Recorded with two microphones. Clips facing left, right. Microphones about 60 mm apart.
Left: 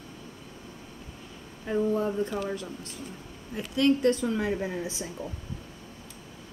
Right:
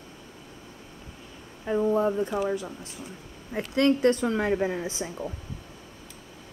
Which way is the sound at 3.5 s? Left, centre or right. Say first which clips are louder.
Right 1 dB; right.